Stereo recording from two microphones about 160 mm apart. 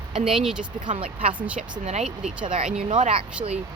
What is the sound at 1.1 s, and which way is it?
Speech, 35° right (ahead or behind).